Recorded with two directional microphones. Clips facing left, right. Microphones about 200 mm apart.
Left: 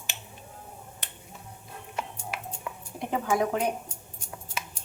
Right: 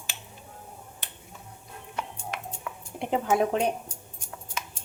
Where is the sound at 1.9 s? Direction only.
5° left (ahead or behind).